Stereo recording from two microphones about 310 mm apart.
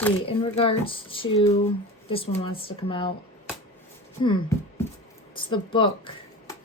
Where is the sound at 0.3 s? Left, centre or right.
Centre.